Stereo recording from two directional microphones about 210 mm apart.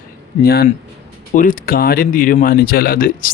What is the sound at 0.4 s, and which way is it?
Speech, 45° left (ahead or behind).